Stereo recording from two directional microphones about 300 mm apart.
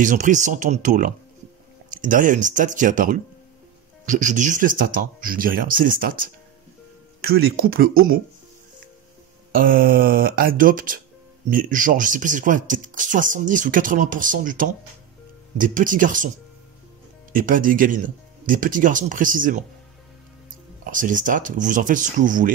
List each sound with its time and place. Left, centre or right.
0.0 s speech: right
9.5 s speech: right
17.3 s speech: right
20.8 s speech: right